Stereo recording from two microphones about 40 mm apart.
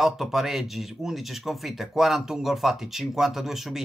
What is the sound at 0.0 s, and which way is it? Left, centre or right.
Speech, centre.